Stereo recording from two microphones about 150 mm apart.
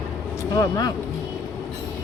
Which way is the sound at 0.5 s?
25° left (ahead or behind).